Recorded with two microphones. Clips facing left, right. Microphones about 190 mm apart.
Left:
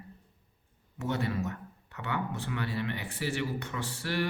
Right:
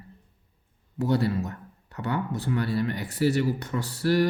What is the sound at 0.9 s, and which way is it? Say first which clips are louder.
Speech: right 7 dB; 35° right (ahead or behind).